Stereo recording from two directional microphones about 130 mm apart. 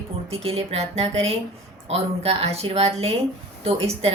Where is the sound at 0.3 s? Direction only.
50° right (ahead or behind).